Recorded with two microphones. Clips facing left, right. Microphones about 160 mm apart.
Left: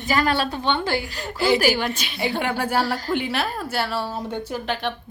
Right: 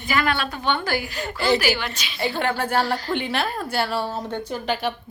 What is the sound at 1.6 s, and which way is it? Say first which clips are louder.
Speech: left 3 dB; 45° left (ahead or behind).